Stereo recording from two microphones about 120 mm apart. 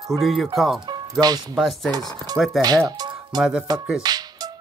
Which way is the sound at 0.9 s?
35° right (ahead or behind).